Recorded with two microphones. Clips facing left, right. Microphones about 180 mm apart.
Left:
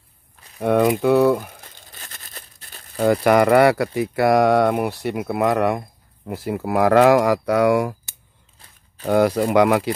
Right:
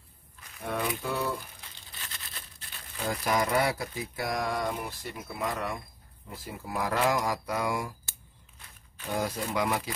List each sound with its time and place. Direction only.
0.6 s speech: 70° left (ahead or behind)
1.4 s crumpling: 50° left (ahead or behind)
3.0 s speech: 70° left (ahead or behind)
9.0 s speech: 75° left (ahead or behind)